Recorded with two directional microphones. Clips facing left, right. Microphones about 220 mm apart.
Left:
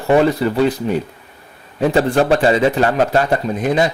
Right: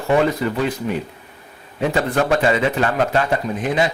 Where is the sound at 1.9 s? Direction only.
35° left (ahead or behind).